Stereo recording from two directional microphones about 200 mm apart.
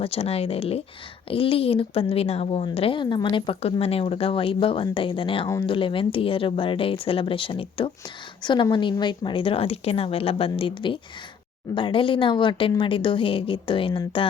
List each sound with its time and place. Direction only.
0.0 s a woman's voice: 30° left (ahead or behind)